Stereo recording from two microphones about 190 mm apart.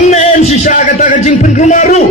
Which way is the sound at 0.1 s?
35° left (ahead or behind).